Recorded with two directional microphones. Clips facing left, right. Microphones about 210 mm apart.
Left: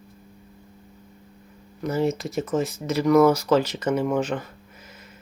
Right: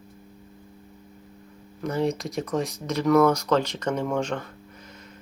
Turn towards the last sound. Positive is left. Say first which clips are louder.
# left 3 dB
turn(degrees=5)  # may be behind; listen again after turning